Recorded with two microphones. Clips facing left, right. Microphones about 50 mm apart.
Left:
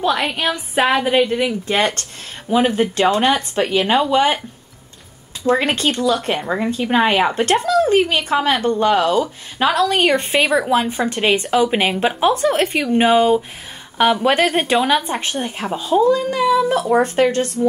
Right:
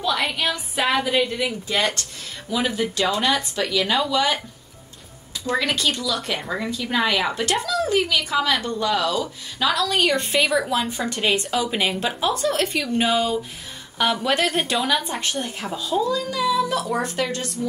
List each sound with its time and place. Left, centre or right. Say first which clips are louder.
0.3 s speech: left 4 dB; left
5.4 s speech: left 6 dB; left
6.4 s speech: left 6 dB; left
6.7 s speech: left 6 dB; left